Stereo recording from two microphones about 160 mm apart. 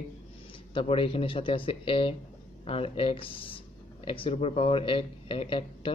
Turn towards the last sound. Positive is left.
turn(degrees=35)  # may be behind; listen again after turning